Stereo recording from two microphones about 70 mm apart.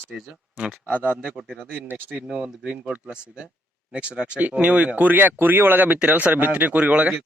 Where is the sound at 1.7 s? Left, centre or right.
Right.